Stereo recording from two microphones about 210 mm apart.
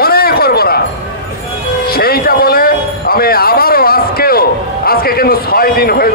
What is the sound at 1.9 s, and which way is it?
A man's voice, 45° left (ahead or behind).